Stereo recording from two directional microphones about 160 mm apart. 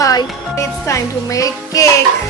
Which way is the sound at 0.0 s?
20° left (ahead or behind).